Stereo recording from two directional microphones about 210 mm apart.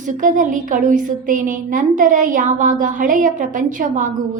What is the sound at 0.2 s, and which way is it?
A woman's voice, 40° right (ahead or behind).